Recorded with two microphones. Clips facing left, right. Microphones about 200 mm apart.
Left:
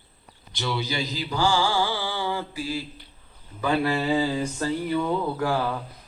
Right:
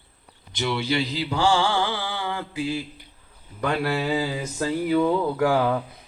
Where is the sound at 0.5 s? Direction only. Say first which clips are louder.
Right 4 dB; 30° right (ahead or behind).